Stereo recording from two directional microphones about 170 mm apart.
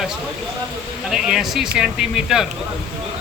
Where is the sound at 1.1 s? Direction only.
Centre (ahead or behind).